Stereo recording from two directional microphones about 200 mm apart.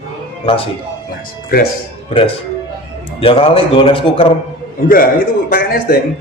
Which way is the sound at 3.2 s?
25° left (ahead or behind).